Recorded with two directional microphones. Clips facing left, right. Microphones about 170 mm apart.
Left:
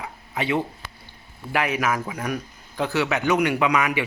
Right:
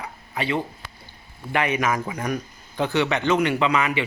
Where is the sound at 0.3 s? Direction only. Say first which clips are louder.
Left 1 dB; 15° left (ahead or behind).